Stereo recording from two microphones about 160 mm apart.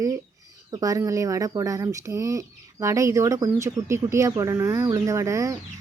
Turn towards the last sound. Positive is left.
turn(degrees=-20)  # may be behind; listen again after turning